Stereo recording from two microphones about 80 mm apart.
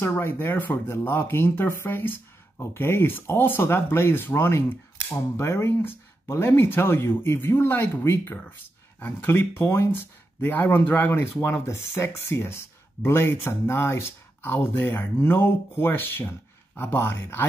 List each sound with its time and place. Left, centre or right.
0.0 s speech: left